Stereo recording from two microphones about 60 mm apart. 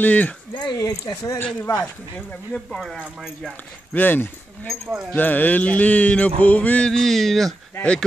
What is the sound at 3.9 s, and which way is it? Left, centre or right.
Speech, left.